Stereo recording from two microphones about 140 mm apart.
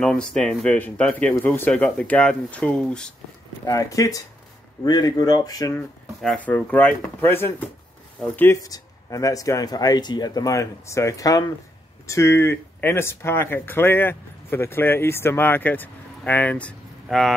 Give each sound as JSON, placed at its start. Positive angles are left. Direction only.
{"t": 0.0, "sound": "speech", "side_deg": 5}
{"t": 3.6, "sound": "speech", "side_deg": 25}
{"t": 6.2, "sound": "speech", "side_deg": 10}
{"t": 8.5, "sound": "speech", "side_deg": 25}